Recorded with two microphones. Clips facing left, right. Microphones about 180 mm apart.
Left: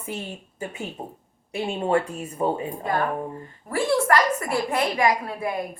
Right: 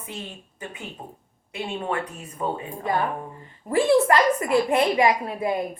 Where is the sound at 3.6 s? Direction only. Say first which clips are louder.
Right 3 dB; 20° right (ahead or behind).